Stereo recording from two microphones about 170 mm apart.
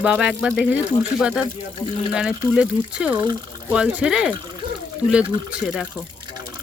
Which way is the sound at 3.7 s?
5° right (ahead or behind).